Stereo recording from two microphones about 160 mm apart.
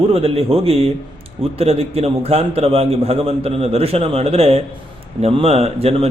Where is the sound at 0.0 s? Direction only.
35° right (ahead or behind).